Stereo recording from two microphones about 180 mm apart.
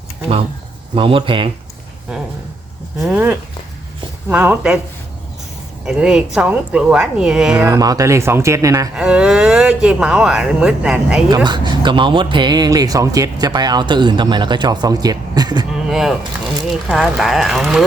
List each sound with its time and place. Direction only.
0.9 s speech: 30° right (ahead or behind)
3.0 s speech: 10° right (ahead or behind)
5.8 s speech: 5° right (ahead or behind)
7.6 s speech: 20° right (ahead or behind)
9.0 s speech: 5° right (ahead or behind)
11.4 s speech: 25° right (ahead or behind)
15.7 s speech: centre (ahead or behind)